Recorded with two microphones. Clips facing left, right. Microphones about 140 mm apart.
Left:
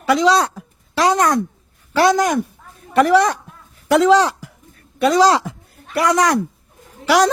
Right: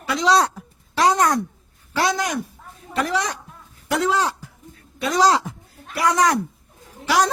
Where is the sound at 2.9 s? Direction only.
65° left (ahead or behind).